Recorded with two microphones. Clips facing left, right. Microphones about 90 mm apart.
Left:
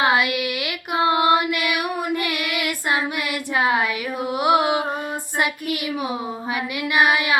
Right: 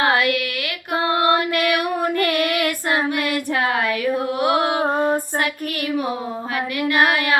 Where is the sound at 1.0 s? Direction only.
20° left (ahead or behind).